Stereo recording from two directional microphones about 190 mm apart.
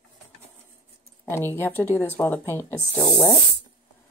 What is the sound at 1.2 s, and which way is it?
Speech, 10° left (ahead or behind).